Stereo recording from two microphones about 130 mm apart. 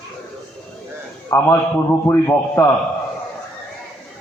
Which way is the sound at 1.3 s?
15° left (ahead or behind).